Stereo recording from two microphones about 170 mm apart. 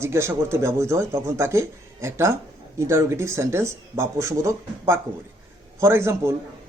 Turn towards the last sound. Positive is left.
turn(degrees=-15)  # may be behind; listen again after turning